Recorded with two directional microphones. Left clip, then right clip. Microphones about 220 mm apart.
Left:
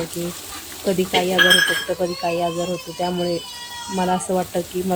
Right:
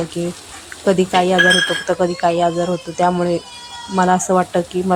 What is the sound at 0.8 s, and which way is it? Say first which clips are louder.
Speech: right 5 dB; 10° right (ahead or behind).